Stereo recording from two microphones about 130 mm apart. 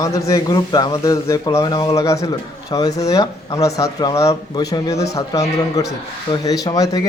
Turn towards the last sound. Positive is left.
turn(degrees=25)  # may be behind; listen again after turning